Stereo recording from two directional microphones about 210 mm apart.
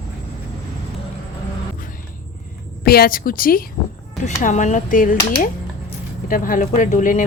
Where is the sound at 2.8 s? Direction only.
45° left (ahead or behind).